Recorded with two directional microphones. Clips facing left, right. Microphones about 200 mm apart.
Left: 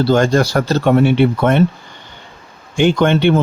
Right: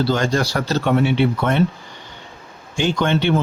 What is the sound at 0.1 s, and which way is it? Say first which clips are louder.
Speech: left 6 dB; 50° left (ahead or behind).